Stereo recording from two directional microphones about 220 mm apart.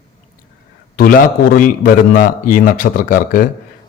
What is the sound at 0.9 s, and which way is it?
Speech, 40° left (ahead or behind).